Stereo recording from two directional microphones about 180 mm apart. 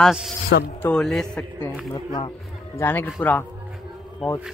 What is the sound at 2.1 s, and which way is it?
Speech, 25° left (ahead or behind).